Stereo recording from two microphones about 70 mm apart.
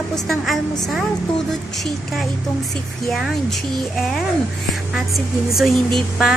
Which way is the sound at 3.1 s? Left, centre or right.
Centre.